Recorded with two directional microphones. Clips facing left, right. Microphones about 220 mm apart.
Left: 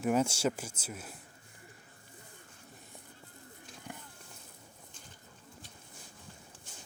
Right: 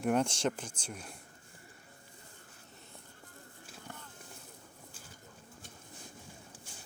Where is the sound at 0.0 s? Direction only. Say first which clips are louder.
Left 1 dB; 5° left (ahead or behind).